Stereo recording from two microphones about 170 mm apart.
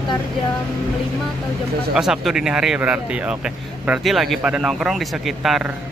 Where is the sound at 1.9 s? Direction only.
5° right (ahead or behind).